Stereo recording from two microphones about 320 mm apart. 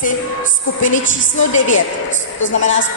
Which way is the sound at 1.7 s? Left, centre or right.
Left.